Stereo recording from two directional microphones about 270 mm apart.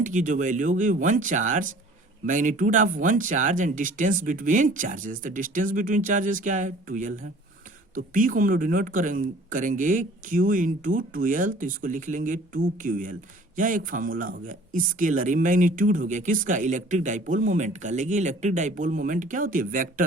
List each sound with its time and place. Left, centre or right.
0.0 s speech: right